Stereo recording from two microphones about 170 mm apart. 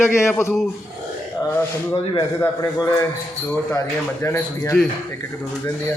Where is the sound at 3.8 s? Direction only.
15° left (ahead or behind).